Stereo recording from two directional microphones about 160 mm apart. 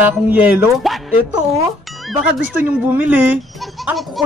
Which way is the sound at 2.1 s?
5° right (ahead or behind).